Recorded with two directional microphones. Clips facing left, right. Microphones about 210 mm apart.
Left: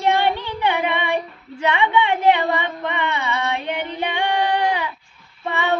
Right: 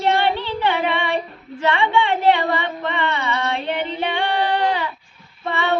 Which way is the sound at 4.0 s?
15° left (ahead or behind).